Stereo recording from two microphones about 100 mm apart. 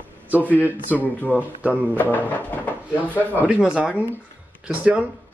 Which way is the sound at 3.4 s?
10° right (ahead or behind).